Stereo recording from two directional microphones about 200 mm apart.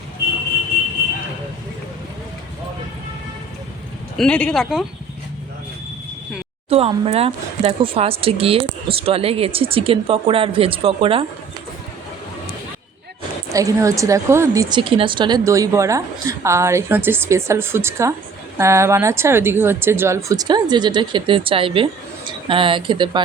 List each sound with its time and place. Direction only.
4.2 s speech: 5° left (ahead or behind)
6.7 s speech: 30° right (ahead or behind)
13.5 s a woman's voice: 15° right (ahead or behind)